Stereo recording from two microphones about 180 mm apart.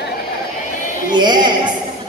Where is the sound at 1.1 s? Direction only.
25° right (ahead or behind).